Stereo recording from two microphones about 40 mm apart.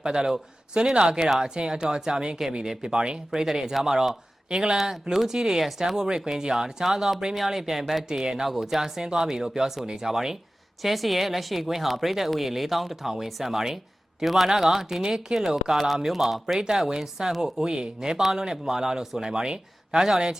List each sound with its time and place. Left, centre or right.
0.0 s a man's voice: centre
4.8 s speech: centre